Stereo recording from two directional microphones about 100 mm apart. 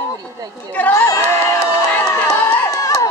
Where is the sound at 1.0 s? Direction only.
30° left (ahead or behind).